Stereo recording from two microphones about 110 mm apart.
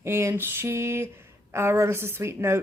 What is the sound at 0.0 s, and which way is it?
Speech, 25° right (ahead or behind).